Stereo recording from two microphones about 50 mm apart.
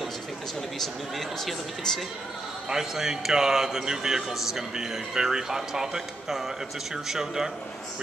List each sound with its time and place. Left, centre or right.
0.7 s speech: centre
2.7 s a man's voice: centre